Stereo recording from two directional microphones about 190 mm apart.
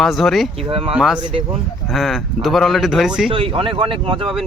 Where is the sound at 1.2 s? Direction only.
30° right (ahead or behind).